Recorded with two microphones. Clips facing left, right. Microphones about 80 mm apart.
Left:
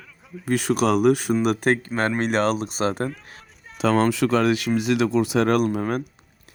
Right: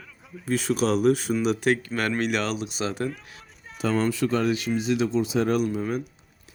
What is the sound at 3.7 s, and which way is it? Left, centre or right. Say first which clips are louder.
Speech: left 5 dB; left.